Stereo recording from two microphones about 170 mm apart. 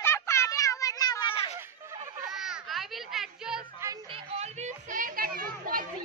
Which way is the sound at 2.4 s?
Centre (ahead or behind).